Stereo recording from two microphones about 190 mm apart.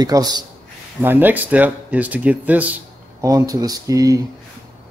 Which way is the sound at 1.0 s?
10° right (ahead or behind).